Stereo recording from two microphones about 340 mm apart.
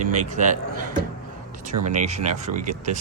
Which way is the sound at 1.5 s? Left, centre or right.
Right.